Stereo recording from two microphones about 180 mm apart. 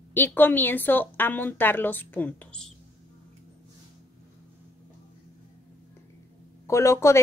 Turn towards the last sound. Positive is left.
turn(degrees=15)  # may be behind; listen again after turning